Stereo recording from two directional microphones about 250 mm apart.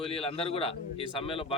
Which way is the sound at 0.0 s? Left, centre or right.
Left.